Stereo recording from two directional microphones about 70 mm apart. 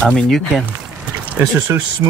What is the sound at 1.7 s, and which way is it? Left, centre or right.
Speech, right.